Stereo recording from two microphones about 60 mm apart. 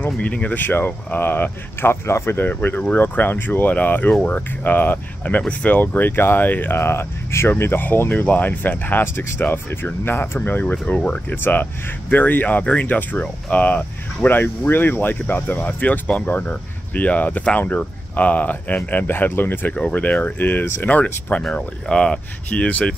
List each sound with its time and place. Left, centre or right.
0.0 s speech: left
2.4 s speech: left
4.1 s speech: centre
4.4 s speech: left
10.6 s speech: left
11.2 s speech: left